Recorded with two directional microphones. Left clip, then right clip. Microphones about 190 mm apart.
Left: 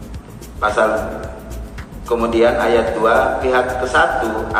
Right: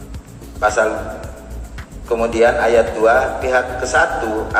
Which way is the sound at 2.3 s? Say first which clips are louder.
Right 1 dB; 40° right (ahead or behind).